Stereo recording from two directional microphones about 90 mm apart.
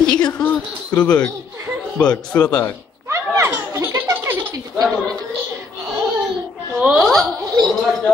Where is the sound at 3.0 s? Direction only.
30° right (ahead or behind).